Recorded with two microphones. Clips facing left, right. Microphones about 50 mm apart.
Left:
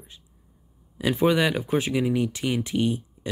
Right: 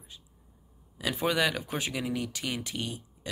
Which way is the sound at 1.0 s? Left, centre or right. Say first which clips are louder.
Left 6 dB; left.